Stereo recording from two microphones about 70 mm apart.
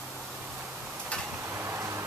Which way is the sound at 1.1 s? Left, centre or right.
Centre.